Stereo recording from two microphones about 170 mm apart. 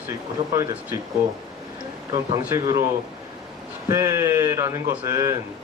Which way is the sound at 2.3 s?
25° right (ahead or behind).